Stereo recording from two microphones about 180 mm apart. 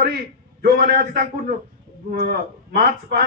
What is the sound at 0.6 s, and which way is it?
A man's voice, 60° right (ahead or behind).